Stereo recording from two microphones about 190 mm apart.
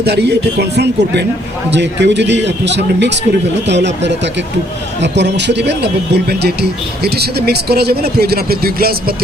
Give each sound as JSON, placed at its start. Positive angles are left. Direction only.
{"t": 0.0, "sound": "a man's voice", "side_deg": -60}